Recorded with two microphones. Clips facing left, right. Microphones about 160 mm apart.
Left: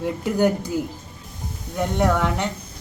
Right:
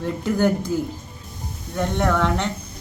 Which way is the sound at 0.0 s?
15° left (ahead or behind).